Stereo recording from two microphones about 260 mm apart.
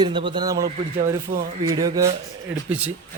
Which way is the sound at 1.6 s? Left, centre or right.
Centre.